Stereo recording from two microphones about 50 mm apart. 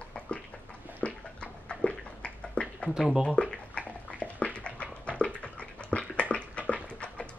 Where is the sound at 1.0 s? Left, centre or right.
Left.